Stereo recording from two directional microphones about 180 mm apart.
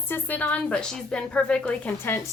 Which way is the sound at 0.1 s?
10° left (ahead or behind).